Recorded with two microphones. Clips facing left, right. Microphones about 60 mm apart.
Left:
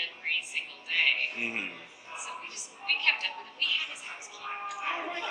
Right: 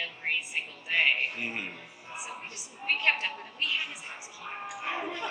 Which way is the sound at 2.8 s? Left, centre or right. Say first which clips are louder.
Right 2 dB; right.